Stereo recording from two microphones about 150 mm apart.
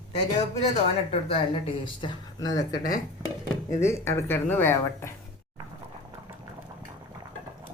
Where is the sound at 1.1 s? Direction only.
35° left (ahead or behind); by 5.1 s 15° left (ahead or behind).